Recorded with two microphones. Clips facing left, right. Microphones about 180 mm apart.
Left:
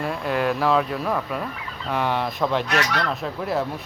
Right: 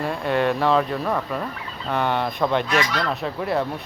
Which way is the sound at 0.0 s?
Centre (ahead or behind).